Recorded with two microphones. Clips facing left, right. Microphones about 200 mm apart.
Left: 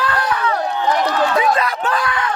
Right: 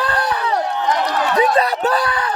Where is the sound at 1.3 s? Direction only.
35° right (ahead or behind).